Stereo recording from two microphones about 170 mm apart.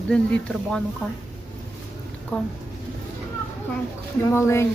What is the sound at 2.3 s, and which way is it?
Speech, 10° left (ahead or behind).